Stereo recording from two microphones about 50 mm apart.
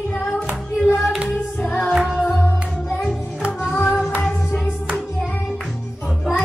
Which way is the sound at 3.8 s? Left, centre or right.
Centre.